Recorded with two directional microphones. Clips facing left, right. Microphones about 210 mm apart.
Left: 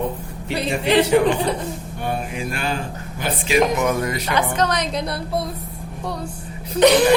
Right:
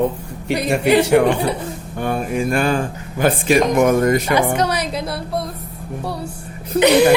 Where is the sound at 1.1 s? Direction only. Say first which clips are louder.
Right 2 dB; 65° right (ahead or behind).